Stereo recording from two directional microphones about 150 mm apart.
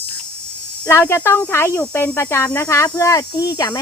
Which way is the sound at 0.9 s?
15° left (ahead or behind).